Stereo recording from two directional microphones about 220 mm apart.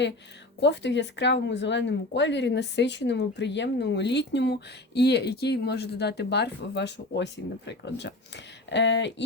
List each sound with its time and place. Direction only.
0.6 s speech: 50° left (ahead or behind)